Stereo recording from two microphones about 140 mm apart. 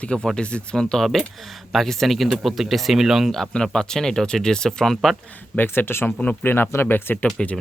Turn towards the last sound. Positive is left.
turn(degrees=5)  # may be behind; listen again after turning